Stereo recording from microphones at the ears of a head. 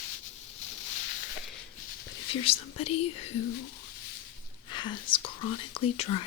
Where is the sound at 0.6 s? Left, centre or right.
Left.